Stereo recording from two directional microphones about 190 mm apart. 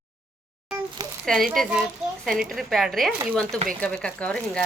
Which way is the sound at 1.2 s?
Centre (ahead or behind).